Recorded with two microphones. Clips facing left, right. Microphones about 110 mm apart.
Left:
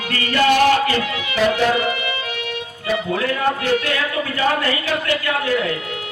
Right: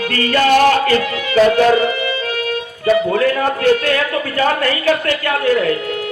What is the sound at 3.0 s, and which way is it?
A man's voice, 45° right (ahead or behind).